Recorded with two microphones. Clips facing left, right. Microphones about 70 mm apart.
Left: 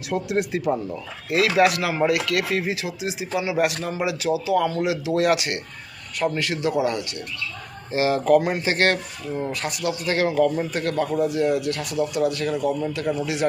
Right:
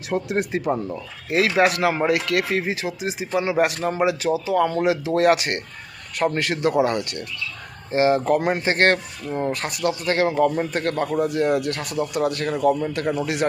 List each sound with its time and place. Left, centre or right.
0.1 s speech: right
7.9 s speech: right